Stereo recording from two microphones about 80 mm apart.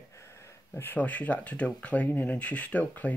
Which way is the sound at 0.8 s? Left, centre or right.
Centre.